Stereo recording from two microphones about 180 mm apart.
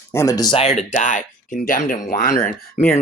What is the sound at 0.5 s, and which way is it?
Speech, 35° left (ahead or behind).